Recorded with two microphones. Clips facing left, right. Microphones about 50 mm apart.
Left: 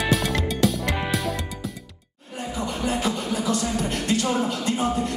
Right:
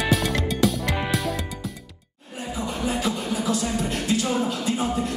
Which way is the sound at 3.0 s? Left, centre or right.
Left.